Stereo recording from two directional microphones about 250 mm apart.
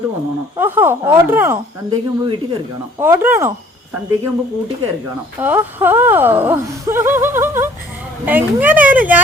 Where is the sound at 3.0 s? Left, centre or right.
Centre.